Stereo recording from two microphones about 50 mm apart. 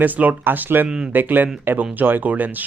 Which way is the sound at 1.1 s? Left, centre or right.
Right.